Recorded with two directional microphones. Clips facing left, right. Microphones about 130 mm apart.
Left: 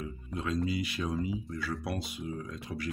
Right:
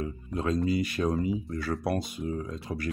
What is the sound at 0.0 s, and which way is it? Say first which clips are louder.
Speech: right 6 dB; 40° right (ahead or behind).